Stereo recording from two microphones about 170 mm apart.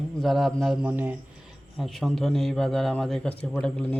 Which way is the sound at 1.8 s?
Centre (ahead or behind).